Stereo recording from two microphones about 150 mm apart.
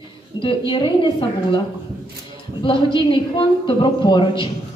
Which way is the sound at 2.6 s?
35° left (ahead or behind).